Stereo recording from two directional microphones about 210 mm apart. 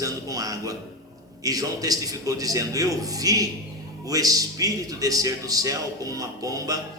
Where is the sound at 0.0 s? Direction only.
15° right (ahead or behind).